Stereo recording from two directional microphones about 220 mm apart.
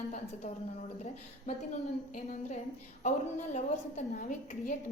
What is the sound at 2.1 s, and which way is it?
A woman's voice, 35° left (ahead or behind).